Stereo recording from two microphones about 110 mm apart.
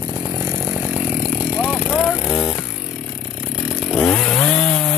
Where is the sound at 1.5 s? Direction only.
10° right (ahead or behind).